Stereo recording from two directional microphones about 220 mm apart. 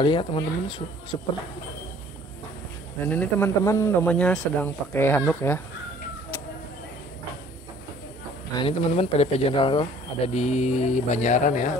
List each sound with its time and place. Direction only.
0.0 s speech: 25° left (ahead or behind)
3.1 s speech: 10° left (ahead or behind)
8.5 s speech: 25° left (ahead or behind)